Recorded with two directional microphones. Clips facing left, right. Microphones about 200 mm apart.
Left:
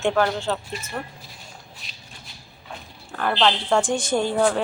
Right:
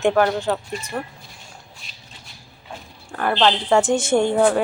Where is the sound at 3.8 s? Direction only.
25° right (ahead or behind).